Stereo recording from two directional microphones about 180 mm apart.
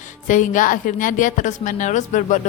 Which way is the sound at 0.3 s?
45° left (ahead or behind).